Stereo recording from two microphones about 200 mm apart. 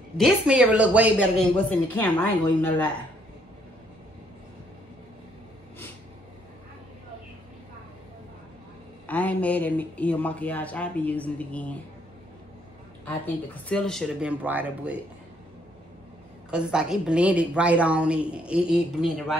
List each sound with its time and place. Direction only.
0.2 s a woman's voice: 5° right (ahead or behind)
1.7 s speech: 10° left (ahead or behind)
9.0 s speech: 5° left (ahead or behind)
13.7 s a woman's voice: 5° left (ahead or behind)
16.4 s a woman's voice: 5° right (ahead or behind)